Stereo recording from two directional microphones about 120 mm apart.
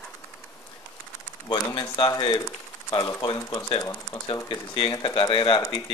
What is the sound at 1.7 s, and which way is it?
Speech, 35° left (ahead or behind).